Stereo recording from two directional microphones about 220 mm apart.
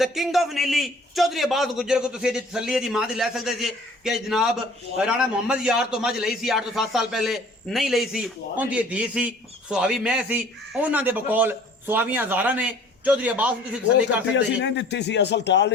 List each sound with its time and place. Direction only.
0.0 s a man's voice: centre (ahead or behind)
14.3 s a man's voice: 55° left (ahead or behind)